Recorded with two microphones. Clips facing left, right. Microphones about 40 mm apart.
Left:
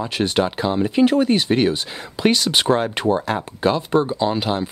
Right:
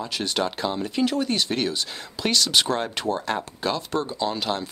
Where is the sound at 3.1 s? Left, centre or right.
Centre.